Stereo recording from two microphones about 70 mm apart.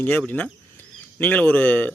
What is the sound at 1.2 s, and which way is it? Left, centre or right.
Speech, left.